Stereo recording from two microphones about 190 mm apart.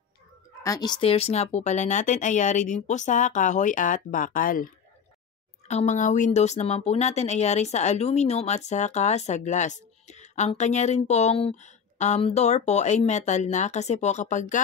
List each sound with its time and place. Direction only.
0.7 s speech: 20° left (ahead or behind); by 4.6 s 45° left (ahead or behind)
5.7 s speech: 40° left (ahead or behind)